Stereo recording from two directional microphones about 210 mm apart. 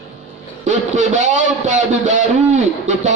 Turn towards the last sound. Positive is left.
turn(degrees=-35)  # may be behind; listen again after turning